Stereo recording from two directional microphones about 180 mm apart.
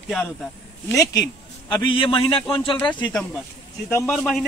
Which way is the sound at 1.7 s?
30° left (ahead or behind).